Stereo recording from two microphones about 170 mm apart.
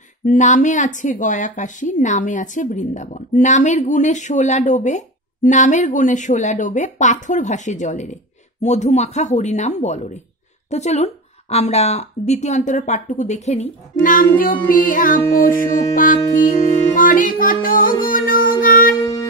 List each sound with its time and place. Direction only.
0.2 s speech: 50° left (ahead or behind)
16.3 s music: 55° left (ahead or behind)